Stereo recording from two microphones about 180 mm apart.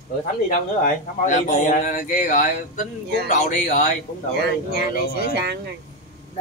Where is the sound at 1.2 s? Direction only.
45° left (ahead or behind).